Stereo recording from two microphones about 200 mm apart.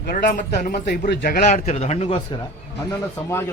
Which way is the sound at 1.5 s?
35° left (ahead or behind).